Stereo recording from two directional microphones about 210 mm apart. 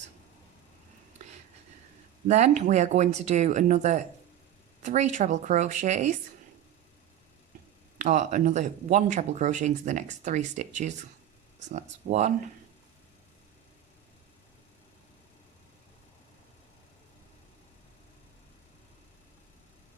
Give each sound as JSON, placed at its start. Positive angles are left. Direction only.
{"t": 2.2, "sound": "speech", "side_deg": -35}
{"t": 7.9, "sound": "speech", "side_deg": -35}